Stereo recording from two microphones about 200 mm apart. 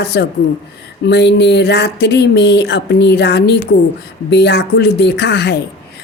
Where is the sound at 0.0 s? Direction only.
55° left (ahead or behind).